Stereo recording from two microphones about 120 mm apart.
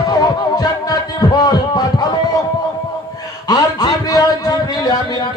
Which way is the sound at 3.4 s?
30° left (ahead or behind).